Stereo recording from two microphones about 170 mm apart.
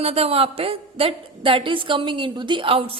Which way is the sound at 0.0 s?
35° right (ahead or behind).